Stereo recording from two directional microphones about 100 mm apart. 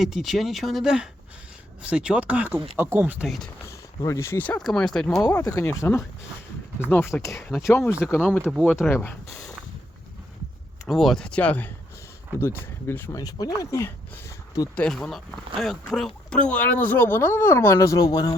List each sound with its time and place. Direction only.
0.0 s speech: 5° right (ahead or behind); by 3.2 s 20° right (ahead or behind)
3.2 s speech: centre (ahead or behind)
3.7 s speech: 30° left (ahead or behind)
4.5 s speech: 5° left (ahead or behind)
5.3 s speech: 35° left (ahead or behind)
10.8 s speech: centre (ahead or behind); by 13.1 s 20° left (ahead or behind)
13.1 s speech: 40° left (ahead or behind)
14.8 s speech: 5° left (ahead or behind); by 18.3 s 40° left (ahead or behind)